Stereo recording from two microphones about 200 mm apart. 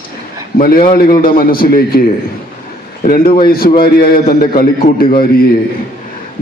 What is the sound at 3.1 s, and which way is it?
A man's voice, 45° left (ahead or behind).